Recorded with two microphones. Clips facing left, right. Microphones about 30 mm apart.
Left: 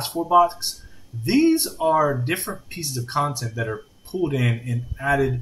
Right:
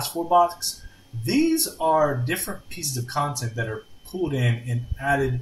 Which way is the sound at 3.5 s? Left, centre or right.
Centre.